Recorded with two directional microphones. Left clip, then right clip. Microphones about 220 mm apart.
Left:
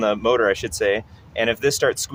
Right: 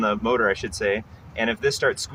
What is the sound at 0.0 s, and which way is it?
Speech, 55° left (ahead or behind).